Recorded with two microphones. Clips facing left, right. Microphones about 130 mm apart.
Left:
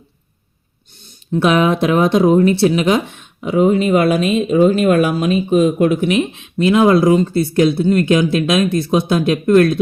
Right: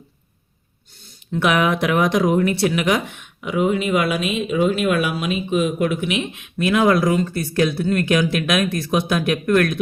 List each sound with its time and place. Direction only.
1.3 s speech: 30° left (ahead or behind)
6.4 s speech: 25° left (ahead or behind)